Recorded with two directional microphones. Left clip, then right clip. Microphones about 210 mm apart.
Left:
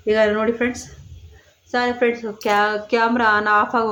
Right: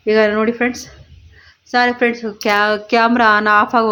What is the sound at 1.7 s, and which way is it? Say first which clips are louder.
Speech: right 5 dB; 45° right (ahead or behind).